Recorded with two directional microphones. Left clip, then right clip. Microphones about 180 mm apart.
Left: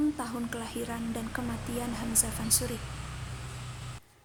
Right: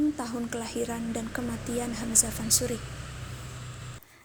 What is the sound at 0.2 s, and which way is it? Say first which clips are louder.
A woman's voice: right 2 dB; 10° right (ahead or behind).